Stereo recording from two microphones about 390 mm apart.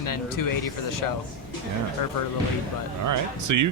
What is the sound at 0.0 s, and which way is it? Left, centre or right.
Speech, left.